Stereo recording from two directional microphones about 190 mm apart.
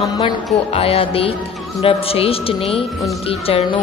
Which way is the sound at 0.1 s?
25° left (ahead or behind).